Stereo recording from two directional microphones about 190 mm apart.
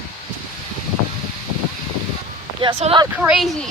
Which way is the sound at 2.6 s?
30° right (ahead or behind).